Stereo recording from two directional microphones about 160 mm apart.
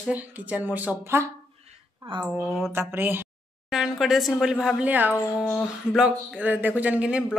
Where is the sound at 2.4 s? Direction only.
Centre (ahead or behind).